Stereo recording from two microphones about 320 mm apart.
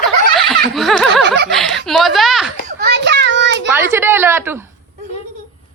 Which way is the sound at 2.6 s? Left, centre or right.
Right.